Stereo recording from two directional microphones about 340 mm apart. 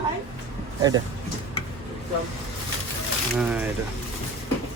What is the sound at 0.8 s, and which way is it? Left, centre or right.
Speech, centre.